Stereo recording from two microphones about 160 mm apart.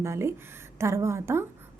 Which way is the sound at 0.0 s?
15° right (ahead or behind).